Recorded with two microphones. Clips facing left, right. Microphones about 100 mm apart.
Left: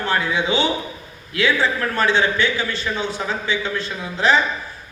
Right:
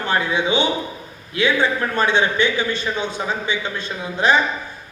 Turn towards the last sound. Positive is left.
turn(degrees=-15)  # may be behind; listen again after turning